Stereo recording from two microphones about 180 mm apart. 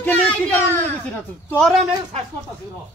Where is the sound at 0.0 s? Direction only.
10° left (ahead or behind).